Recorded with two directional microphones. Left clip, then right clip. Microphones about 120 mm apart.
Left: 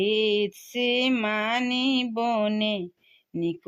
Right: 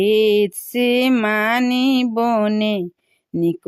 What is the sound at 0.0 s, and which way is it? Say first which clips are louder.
Mantra: right 8 dB; 75° right (ahead or behind).